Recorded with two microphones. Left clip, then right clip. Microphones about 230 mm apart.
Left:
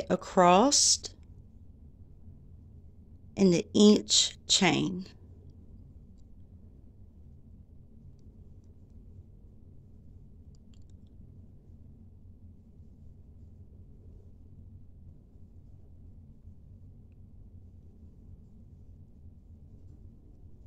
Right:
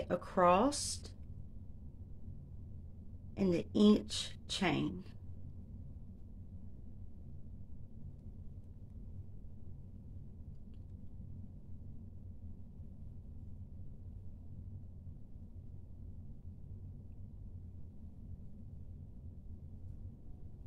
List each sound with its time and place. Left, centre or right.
0.0 s a woman's voice: left
3.3 s a woman's voice: left